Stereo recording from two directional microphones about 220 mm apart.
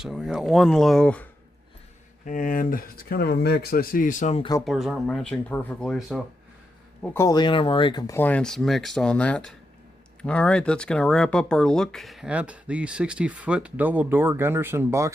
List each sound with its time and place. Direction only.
0.0 s speech: centre (ahead or behind)
2.2 s speech: 35° left (ahead or behind)
4.6 s speech: centre (ahead or behind)
7.0 s speech: 10° left (ahead or behind); by 15.1 s 10° right (ahead or behind)